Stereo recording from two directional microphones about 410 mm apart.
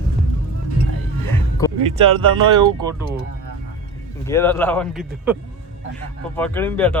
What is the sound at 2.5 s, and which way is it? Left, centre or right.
Speech, centre.